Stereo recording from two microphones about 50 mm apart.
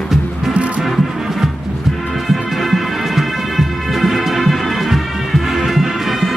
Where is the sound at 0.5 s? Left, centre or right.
Right.